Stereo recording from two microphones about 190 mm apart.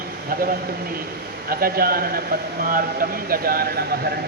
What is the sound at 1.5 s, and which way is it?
Speech, 50° right (ahead or behind).